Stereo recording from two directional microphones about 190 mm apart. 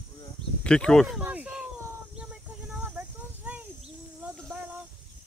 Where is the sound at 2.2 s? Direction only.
5° right (ahead or behind).